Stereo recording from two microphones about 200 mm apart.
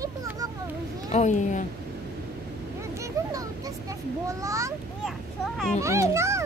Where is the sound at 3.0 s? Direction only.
15° right (ahead or behind).